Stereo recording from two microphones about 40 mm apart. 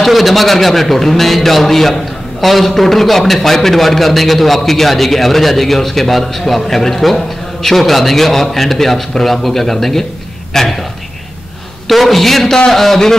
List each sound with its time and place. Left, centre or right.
0.0 s a man's voice: centre
11.9 s a man's voice: centre